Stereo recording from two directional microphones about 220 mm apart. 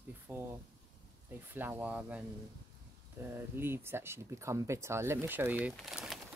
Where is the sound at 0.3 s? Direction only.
10° right (ahead or behind).